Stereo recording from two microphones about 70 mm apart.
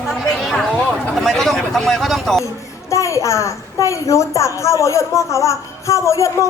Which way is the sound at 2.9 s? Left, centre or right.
Left.